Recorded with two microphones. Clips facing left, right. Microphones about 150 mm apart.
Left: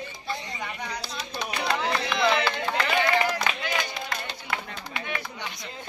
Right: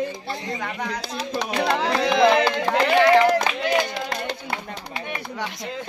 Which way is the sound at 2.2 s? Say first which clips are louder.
Right 6 dB; 50° right (ahead or behind).